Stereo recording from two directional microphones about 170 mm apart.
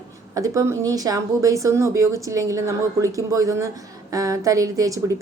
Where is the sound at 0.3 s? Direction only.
20° right (ahead or behind).